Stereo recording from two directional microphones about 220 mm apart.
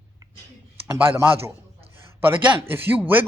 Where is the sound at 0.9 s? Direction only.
10° right (ahead or behind).